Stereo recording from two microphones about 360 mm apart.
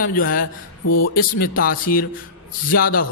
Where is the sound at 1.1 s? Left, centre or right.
Left.